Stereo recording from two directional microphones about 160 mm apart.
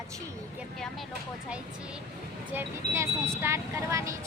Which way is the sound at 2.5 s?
15° right (ahead or behind).